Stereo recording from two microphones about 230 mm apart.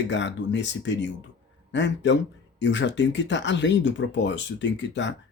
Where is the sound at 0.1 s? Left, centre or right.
Left.